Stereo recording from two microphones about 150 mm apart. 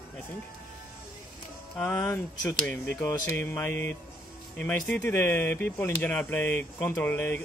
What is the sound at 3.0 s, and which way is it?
Speech, 20° left (ahead or behind).